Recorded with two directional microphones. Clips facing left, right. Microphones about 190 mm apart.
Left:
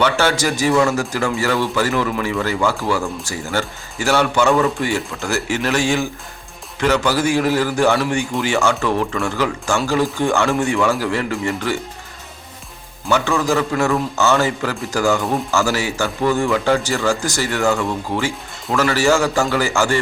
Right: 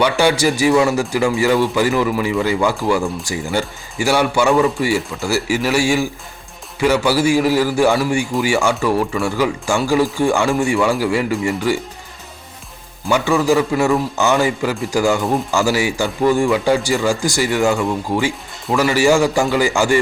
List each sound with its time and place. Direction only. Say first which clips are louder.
0.0 s speech: right 3 dB; 15° right (ahead or behind)
13.1 s speech: right 3 dB; 10° right (ahead or behind)